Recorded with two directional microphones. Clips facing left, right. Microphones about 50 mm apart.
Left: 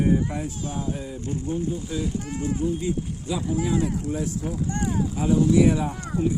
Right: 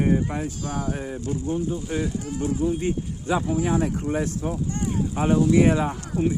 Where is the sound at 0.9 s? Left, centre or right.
Right.